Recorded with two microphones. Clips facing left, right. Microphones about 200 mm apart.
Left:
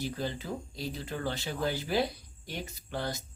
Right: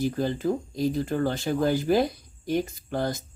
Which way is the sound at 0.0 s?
45° right (ahead or behind).